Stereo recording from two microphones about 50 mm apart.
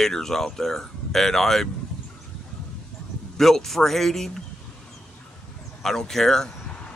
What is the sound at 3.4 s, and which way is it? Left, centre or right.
Speech, centre.